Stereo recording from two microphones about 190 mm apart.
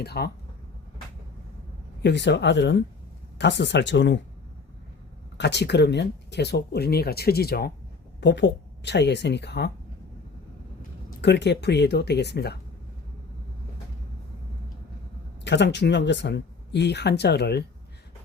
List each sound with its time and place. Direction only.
0.0 s speech: 55° left (ahead or behind)
2.0 s speech: 65° left (ahead or behind)
5.4 s speech: 65° left (ahead or behind)
8.2 s speech: 70° left (ahead or behind)
11.2 s speech: 65° left (ahead or behind)
15.4 s speech: 65° left (ahead or behind)